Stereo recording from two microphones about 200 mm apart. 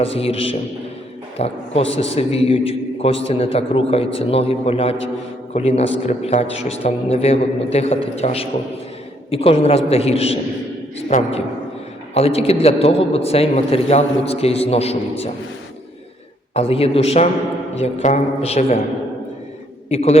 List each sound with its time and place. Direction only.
0.0 s a man's voice: 30° left (ahead or behind)
16.6 s a man's voice: 30° left (ahead or behind)
19.9 s a man's voice: 30° left (ahead or behind)